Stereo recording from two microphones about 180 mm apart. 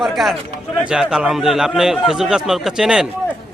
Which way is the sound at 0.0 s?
Centre (ahead or behind).